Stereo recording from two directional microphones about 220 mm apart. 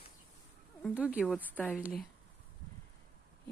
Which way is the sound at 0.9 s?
5° right (ahead or behind).